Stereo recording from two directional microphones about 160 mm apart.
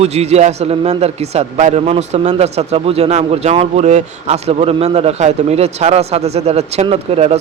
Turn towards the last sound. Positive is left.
turn(degrees=-40)  # may be behind; listen again after turning